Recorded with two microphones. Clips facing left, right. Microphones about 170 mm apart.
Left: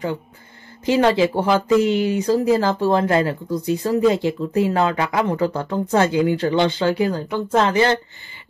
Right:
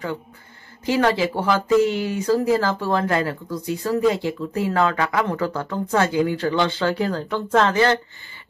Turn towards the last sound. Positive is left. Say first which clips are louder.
# left 1 dB
turn(degrees=15)  # may be behind; listen again after turning